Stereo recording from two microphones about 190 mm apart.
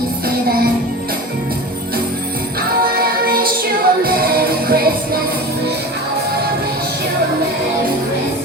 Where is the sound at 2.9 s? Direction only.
50° right (ahead or behind).